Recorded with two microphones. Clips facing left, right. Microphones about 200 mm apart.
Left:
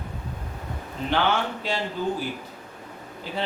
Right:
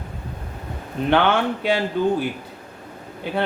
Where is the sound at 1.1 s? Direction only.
60° right (ahead or behind).